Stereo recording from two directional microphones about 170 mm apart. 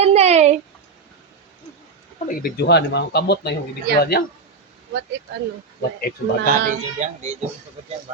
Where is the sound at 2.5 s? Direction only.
85° left; by 4.2 s 65° left (ahead or behind).